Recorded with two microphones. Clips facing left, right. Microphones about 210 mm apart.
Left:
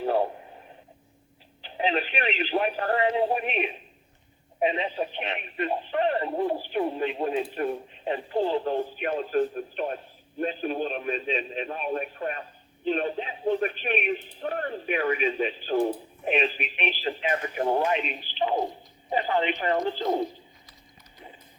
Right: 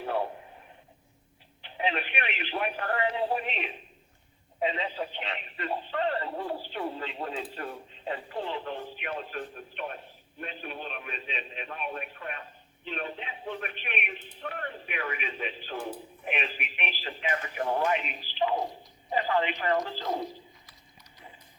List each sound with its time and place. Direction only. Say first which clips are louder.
0.0 s radio: left 6 dB; 35° left (ahead or behind)
1.6 s telephone: left 4 dB; 30° left (ahead or behind)
4.6 s a man's voice: left 4 dB; 25° left (ahead or behind)